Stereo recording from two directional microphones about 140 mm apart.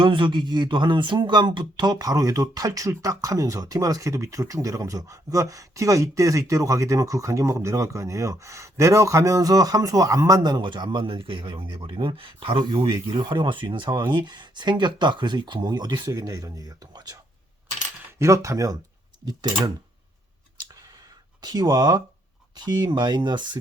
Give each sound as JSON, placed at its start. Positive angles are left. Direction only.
{"t": 0.0, "sound": "speech", "side_deg": -35}
{"t": 18.2, "sound": "speech", "side_deg": -20}
{"t": 21.4, "sound": "speech", "side_deg": -30}